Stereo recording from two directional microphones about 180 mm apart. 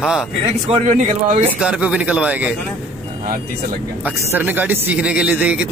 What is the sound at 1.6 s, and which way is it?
Speech, 5° right (ahead or behind).